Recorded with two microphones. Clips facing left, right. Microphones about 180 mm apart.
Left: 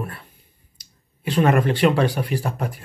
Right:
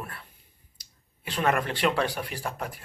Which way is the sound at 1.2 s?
15° left (ahead or behind).